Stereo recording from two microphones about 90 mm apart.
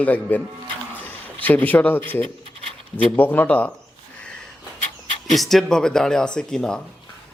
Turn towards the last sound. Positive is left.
turn(degrees=10)  # may be behind; listen again after turning